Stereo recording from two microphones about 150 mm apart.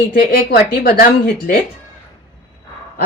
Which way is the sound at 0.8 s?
70° left (ahead or behind).